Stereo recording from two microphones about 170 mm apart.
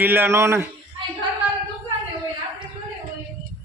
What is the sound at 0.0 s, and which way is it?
Speech, 10° right (ahead or behind).